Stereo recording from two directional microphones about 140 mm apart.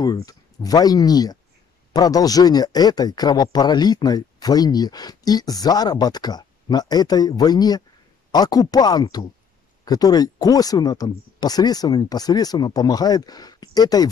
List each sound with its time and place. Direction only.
0.0 s speech: 25° left (ahead or behind)